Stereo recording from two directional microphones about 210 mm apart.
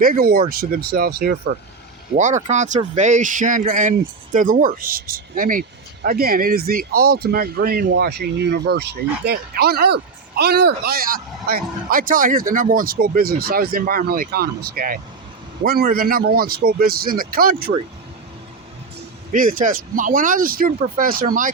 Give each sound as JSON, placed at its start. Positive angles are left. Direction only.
{"t": 0.0, "sound": "speech", "side_deg": -45}
{"t": 2.1, "sound": "speech", "side_deg": -35}
{"t": 19.3, "sound": "speech", "side_deg": -40}